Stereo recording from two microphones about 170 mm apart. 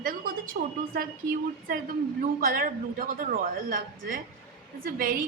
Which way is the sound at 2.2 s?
55° right (ahead or behind).